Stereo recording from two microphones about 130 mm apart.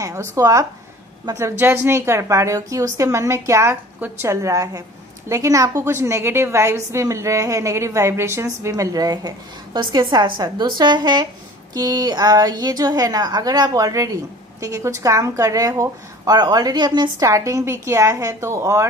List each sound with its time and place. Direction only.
0.0 s a woman's voice: 20° right (ahead or behind)